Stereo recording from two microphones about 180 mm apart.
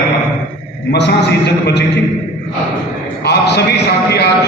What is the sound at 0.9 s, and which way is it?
Speech, 70° left (ahead or behind).